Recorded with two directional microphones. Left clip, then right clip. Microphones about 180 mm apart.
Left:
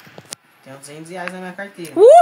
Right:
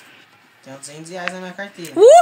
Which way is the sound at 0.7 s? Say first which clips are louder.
Even; 10° left (ahead or behind).